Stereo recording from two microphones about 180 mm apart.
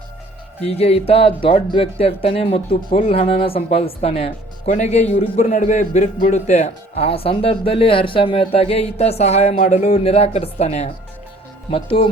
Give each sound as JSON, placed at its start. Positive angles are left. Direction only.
{"t": 0.6, "sound": "speech", "side_deg": 35}